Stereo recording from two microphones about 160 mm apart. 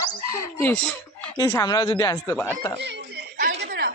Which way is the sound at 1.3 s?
20° left (ahead or behind).